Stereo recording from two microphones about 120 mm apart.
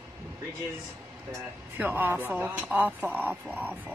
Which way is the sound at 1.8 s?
15° right (ahead or behind).